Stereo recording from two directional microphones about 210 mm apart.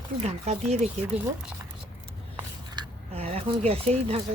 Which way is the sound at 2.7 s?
30° right (ahead or behind).